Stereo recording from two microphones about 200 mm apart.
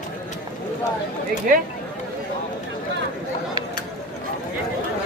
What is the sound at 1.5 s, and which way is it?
Speech, 45° right (ahead or behind).